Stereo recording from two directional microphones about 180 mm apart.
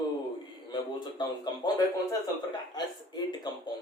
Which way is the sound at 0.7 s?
25° left (ahead or behind).